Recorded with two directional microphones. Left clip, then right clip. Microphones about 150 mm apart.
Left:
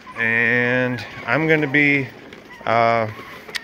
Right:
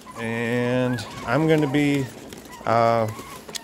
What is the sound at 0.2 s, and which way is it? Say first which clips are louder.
Speech: left 8 dB; 15° right (ahead or behind).